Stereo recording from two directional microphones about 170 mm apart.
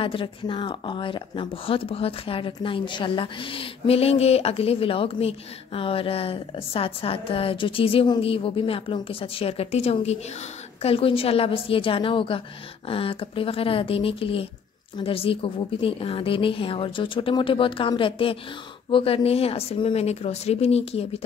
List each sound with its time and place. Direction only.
0.0 s a woman's voice: 30° left (ahead or behind)